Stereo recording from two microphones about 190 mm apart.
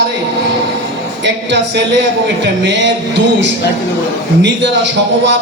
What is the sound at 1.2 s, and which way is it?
Speech, 65° right (ahead or behind).